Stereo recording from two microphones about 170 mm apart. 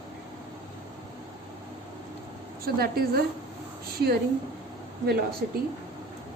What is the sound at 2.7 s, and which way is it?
Speech, 60° right (ahead or behind).